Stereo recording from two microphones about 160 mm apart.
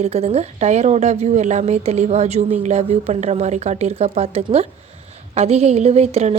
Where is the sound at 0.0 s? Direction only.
40° right (ahead or behind).